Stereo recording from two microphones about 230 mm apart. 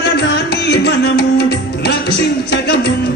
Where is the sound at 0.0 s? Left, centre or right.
Left.